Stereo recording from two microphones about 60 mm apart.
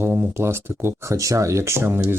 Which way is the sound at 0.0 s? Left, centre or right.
Right.